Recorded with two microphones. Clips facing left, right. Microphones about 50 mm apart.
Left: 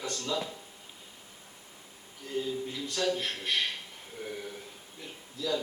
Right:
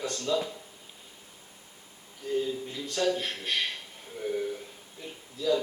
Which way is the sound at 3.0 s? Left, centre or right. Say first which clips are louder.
Right 3 dB; right.